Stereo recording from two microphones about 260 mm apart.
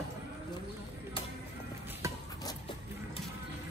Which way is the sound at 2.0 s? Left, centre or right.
Centre.